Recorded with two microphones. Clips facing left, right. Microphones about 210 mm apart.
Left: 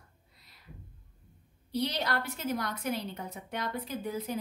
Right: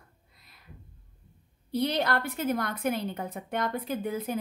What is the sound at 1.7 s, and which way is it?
A woman's voice, 55° right (ahead or behind).